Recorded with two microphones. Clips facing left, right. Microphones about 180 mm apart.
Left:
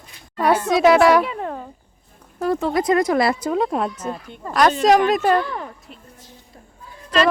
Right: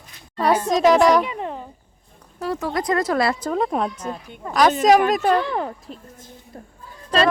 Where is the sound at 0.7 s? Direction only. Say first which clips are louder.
Left 2 dB; 5° left (ahead or behind).